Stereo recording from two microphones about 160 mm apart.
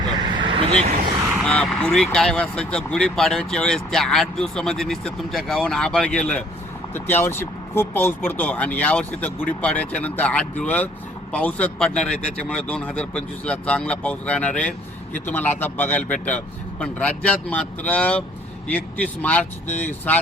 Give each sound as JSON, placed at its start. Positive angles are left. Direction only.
{"t": 0.3, "sound": "vehicle", "side_deg": -35}
{"t": 1.5, "sound": "speech", "side_deg": 5}